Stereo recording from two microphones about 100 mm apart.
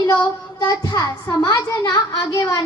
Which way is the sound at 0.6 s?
40° left (ahead or behind).